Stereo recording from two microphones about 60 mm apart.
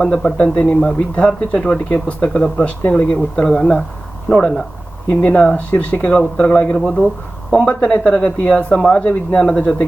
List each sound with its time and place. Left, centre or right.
0.0 s speech: centre
5.0 s speech: left
5.4 s speech: left
6.5 s speech: left
6.7 s speech: centre